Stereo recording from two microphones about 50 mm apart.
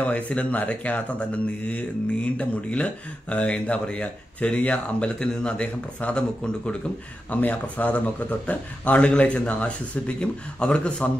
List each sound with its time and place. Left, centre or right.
0.0 s speech: left
2.3 s speech: left
7.2 s speech: left